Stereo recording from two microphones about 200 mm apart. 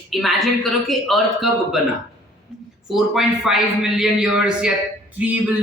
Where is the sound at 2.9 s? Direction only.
Centre (ahead or behind).